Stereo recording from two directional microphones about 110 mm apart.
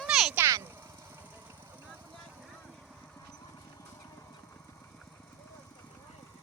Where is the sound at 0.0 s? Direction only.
5° right (ahead or behind).